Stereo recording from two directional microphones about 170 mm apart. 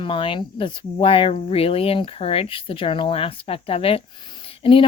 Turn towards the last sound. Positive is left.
turn(degrees=30)  # may be behind; listen again after turning